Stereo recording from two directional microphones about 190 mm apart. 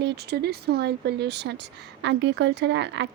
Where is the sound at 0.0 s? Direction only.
60° right (ahead or behind).